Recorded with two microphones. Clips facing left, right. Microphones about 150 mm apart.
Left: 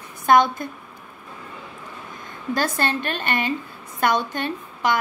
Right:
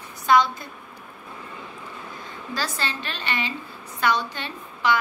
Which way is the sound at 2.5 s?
50° left (ahead or behind).